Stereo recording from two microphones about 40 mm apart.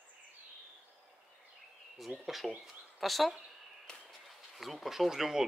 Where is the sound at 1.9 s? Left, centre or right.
Centre.